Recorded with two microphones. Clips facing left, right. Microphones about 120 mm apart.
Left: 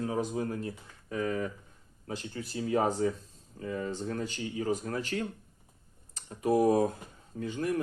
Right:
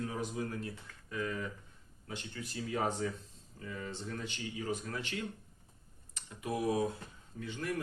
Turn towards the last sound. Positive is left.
turn(degrees=35)  # may be behind; listen again after turning